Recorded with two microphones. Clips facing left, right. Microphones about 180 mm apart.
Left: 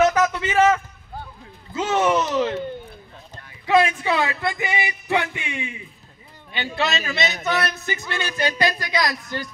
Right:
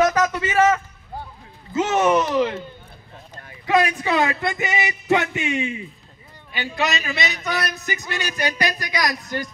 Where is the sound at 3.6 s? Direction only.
20° left (ahead or behind).